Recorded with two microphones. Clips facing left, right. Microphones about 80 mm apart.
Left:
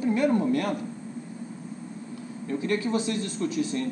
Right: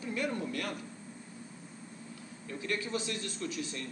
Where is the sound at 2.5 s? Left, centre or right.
Left.